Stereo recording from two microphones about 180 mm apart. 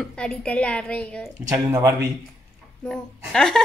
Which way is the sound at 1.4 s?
20° right (ahead or behind).